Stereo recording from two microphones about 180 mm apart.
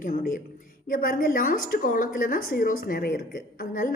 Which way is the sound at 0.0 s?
50° left (ahead or behind).